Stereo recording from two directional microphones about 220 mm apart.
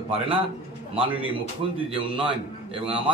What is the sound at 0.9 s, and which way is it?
A man's voice, 25° right (ahead or behind).